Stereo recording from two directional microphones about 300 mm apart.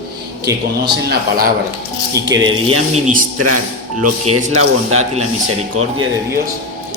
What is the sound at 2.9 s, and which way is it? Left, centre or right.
Speech, right.